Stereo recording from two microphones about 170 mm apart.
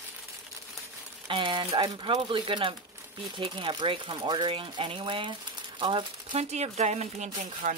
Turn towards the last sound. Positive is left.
turn(degrees=-40)  # may be behind; listen again after turning